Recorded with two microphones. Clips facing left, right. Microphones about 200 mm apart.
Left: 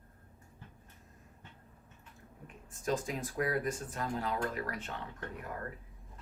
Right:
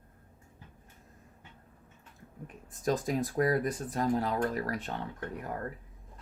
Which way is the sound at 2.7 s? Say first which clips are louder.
Right 5 dB; 40° right (ahead or behind).